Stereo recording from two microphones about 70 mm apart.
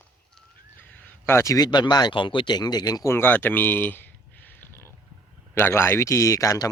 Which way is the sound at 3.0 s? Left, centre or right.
Left.